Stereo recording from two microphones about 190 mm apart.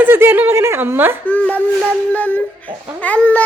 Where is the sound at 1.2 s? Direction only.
5° left (ahead or behind).